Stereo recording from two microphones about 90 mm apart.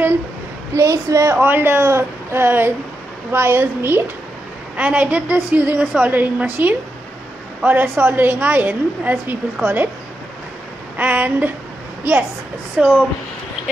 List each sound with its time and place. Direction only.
0.7 s a woman's voice: 35° right (ahead or behind)
11.0 s a woman's voice: 15° right (ahead or behind)
12.7 s a woman's voice: 10° right (ahead or behind)